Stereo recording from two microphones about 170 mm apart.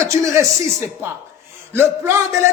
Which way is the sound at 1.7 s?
15° right (ahead or behind).